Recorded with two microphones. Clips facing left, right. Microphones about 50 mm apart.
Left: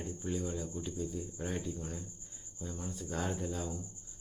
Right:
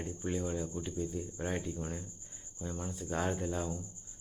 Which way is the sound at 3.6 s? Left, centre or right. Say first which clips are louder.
Right 2 dB; centre.